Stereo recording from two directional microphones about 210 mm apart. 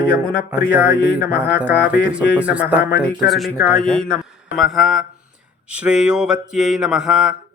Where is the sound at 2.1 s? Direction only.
5° right (ahead or behind).